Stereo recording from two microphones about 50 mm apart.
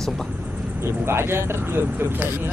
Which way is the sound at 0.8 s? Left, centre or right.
Right.